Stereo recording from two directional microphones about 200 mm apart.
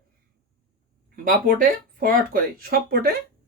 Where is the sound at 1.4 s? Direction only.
45° right (ahead or behind).